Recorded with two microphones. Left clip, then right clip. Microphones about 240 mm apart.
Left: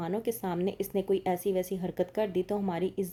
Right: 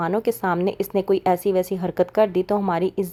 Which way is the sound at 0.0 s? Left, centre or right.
Centre.